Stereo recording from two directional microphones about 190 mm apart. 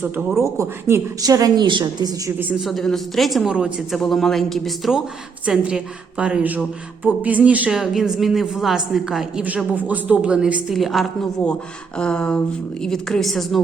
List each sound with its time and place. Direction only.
0.0 s speech: 10° right (ahead or behind)
2.4 s a woman's voice: 5° right (ahead or behind)